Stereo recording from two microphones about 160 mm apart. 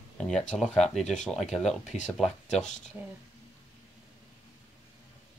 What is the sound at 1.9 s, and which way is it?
Speech, 40° left (ahead or behind).